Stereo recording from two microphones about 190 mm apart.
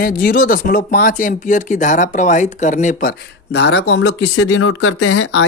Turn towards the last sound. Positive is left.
turn(degrees=70)  # may be behind; listen again after turning